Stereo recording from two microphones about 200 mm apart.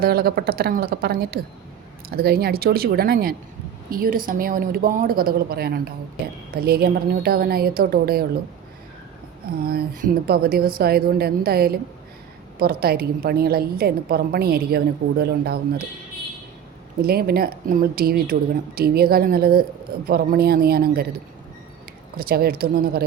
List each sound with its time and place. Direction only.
0.0 s speech: 50° right (ahead or behind)
9.6 s speech: 45° right (ahead or behind)
17.0 s speech: 50° right (ahead or behind)
22.2 s speech: 50° right (ahead or behind)